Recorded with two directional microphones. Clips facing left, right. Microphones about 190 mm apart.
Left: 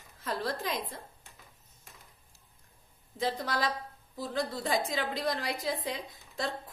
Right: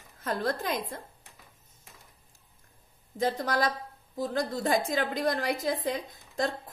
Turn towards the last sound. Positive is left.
turn(degrees=-45)  # may be behind; listen again after turning